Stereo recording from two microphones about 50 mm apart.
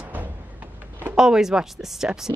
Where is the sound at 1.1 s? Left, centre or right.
Centre.